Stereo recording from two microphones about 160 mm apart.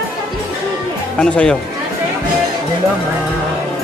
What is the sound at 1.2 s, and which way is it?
Speech, 5° left (ahead or behind).